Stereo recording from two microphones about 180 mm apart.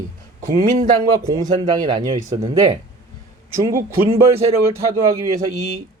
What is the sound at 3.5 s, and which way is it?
Speech, 15° right (ahead or behind).